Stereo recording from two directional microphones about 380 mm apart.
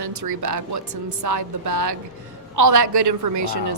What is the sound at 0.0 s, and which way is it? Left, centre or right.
Speech, right.